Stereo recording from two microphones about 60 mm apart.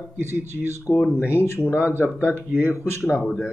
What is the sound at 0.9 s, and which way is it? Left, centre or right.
Speech, left.